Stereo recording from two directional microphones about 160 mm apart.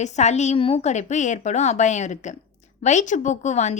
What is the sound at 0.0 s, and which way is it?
A woman's voice, 45° left (ahead or behind).